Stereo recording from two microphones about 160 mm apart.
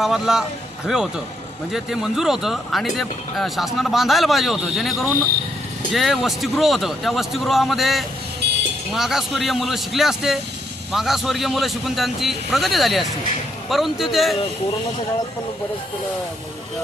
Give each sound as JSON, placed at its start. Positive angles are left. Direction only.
{"t": 0.0, "sound": "speech", "side_deg": -5}
{"t": 8.4, "sound": "vehicle", "side_deg": -90}
{"t": 8.9, "sound": "speech", "side_deg": 0}